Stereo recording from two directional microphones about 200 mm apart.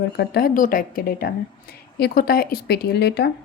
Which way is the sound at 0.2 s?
50° left (ahead or behind).